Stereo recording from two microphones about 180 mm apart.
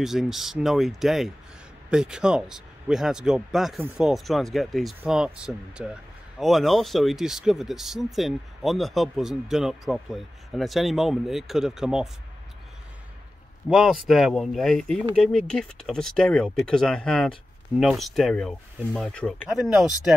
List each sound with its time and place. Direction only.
0.0 s speech: centre (ahead or behind)
13.7 s speech: 5° right (ahead or behind)